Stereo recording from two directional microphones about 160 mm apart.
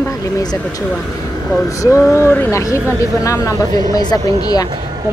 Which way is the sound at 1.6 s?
20° left (ahead or behind).